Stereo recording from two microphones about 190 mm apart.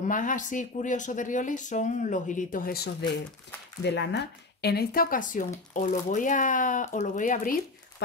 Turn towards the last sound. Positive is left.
turn(degrees=45)  # may be behind; listen again after turning